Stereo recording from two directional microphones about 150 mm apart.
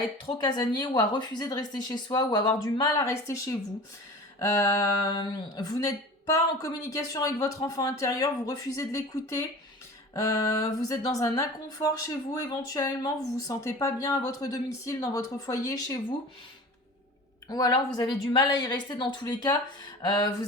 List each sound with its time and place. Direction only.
0.3 s speech: 30° left (ahead or behind)
17.5 s speech: 25° left (ahead or behind)
20.0 s a sound: 30° left (ahead or behind)